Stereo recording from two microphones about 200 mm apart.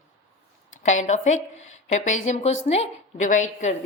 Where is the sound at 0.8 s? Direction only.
35° left (ahead or behind).